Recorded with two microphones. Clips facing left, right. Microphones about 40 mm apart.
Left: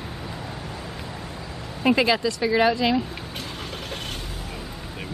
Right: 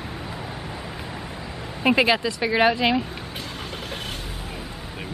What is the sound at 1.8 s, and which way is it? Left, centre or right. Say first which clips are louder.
Speech: right 1 dB; centre.